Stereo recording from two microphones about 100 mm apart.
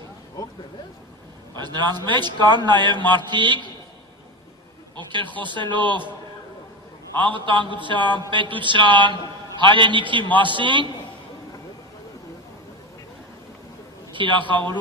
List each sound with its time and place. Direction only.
1.6 s a man's voice: 45° right (ahead or behind)
4.9 s a man's voice: 55° right (ahead or behind)
7.2 s a man's voice: 55° right (ahead or behind)
14.1 s a man's voice: 55° right (ahead or behind)